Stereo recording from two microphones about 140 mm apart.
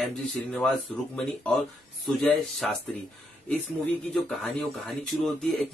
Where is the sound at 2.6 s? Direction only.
5° left (ahead or behind).